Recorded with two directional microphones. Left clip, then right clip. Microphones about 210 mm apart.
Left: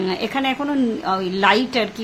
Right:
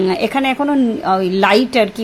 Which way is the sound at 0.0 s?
25° right (ahead or behind).